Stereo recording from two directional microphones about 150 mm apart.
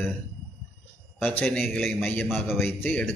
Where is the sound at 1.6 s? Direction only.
Centre (ahead or behind).